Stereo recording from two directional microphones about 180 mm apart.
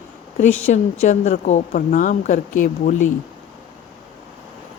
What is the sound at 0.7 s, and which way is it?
A woman's voice, 45° left (ahead or behind).